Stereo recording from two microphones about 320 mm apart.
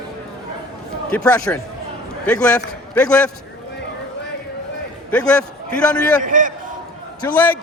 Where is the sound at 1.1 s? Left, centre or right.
Centre.